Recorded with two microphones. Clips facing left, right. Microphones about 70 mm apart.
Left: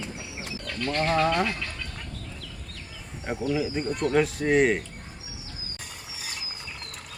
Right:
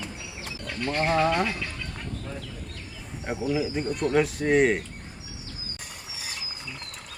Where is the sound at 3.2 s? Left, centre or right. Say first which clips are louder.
Even; centre.